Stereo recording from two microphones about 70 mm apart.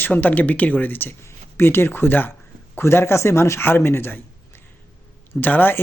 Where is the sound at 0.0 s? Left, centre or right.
Left.